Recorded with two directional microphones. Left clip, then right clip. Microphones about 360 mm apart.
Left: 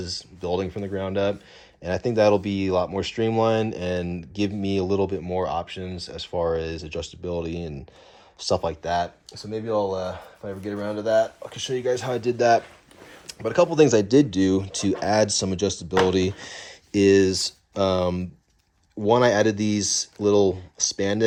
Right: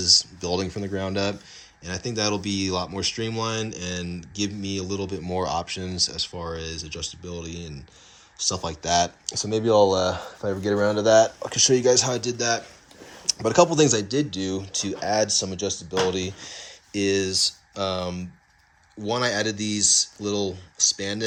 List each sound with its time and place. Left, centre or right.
0.0 s speech: centre
9.2 s speech: right; by 12.6 s centre
13.2 s speech: centre
14.1 s speech: centre